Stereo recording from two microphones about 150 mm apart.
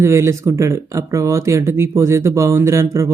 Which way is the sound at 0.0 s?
20° right (ahead or behind).